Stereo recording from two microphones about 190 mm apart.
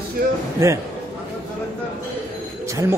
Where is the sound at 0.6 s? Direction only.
15° right (ahead or behind).